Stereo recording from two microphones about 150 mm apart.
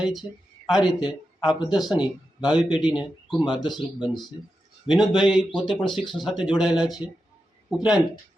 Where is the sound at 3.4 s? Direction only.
30° left (ahead or behind).